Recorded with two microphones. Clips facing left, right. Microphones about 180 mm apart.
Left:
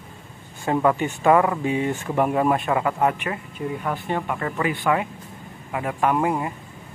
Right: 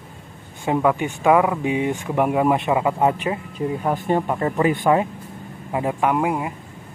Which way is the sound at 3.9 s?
45° right (ahead or behind).